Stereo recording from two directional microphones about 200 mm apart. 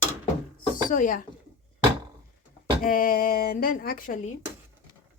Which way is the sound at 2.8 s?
45° left (ahead or behind).